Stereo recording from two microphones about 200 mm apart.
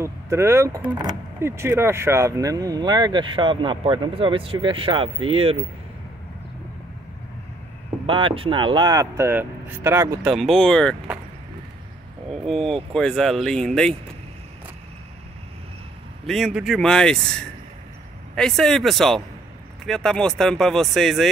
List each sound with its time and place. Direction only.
0.0 s speech: 15° right (ahead or behind)
8.1 s speech: 25° right (ahead or behind)
10.2 s speech: centre (ahead or behind)
12.3 s speech: centre (ahead or behind)
16.3 s speech: centre (ahead or behind)